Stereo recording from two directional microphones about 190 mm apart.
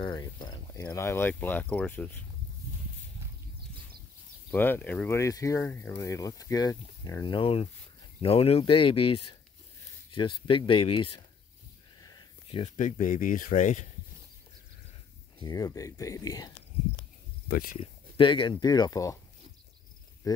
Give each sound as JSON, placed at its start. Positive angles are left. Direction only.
{"t": 0.0, "sound": "speech", "side_deg": 20}
{"t": 4.5, "sound": "speech", "side_deg": 10}
{"t": 15.3, "sound": "speech", "side_deg": 20}
{"t": 17.7, "sound": "speech", "side_deg": 25}
{"t": 20.2, "sound": "speech", "side_deg": 20}